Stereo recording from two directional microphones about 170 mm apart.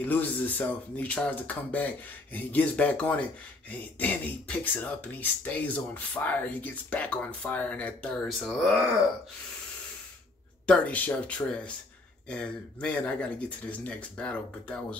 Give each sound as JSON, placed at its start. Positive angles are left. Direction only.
{"t": 0.0, "sound": "speech", "side_deg": 10}
{"t": 10.7, "sound": "speech", "side_deg": 5}